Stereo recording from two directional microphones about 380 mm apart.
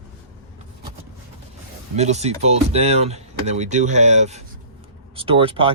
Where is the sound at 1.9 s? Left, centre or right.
Centre.